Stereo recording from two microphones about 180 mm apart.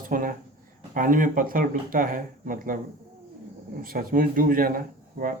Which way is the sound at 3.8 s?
50° right (ahead or behind).